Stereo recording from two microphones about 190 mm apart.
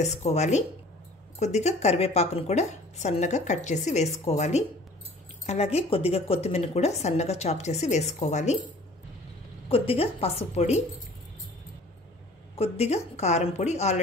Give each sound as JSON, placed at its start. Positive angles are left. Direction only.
{"t": 0.0, "sound": "a woman's voice", "side_deg": 35}
{"t": 9.7, "sound": "a woman's voice", "side_deg": 30}
{"t": 12.5, "sound": "a woman's voice", "side_deg": 30}